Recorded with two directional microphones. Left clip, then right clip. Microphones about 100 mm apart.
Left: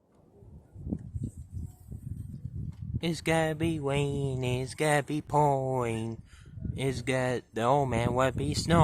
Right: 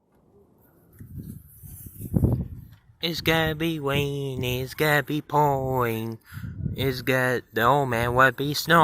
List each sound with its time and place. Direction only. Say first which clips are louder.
3.0 s speech: right 5 dB; 5° right (ahead or behind)
5.8 s speech: right 6 dB; 20° right (ahead or behind)